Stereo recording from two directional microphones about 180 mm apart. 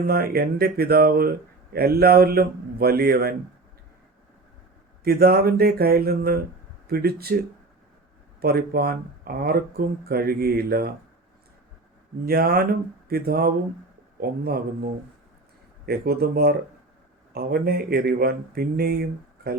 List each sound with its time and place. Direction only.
0.1 s speech: 60° right (ahead or behind)
5.0 s speech: 60° right (ahead or behind)
8.4 s speech: 60° right (ahead or behind)
12.2 s speech: 60° right (ahead or behind)
15.9 s speech: 60° right (ahead or behind)